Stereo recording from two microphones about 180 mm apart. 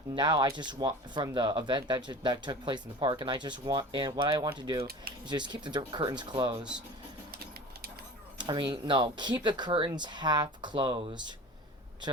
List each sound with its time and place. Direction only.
0.2 s speech: 25° right (ahead or behind)
8.4 s speech: 25° right (ahead or behind)